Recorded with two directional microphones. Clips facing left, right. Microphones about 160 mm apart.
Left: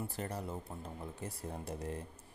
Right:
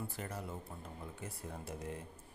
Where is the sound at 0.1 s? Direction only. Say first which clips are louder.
Left 3 dB; 35° left (ahead or behind).